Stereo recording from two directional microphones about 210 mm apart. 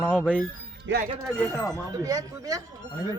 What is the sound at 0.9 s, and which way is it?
Speech, 60° right (ahead or behind).